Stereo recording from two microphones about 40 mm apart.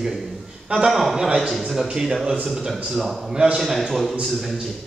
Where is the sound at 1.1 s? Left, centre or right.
Centre.